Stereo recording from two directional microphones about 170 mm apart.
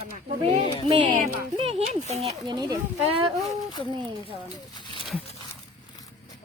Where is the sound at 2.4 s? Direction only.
25° right (ahead or behind).